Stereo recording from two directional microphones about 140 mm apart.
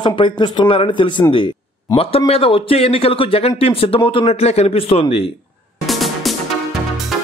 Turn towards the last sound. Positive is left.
turn(degrees=0)  # may be behind; listen again after turning